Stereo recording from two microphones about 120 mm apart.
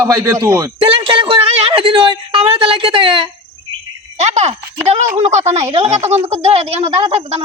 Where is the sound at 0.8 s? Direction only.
45° right (ahead or behind).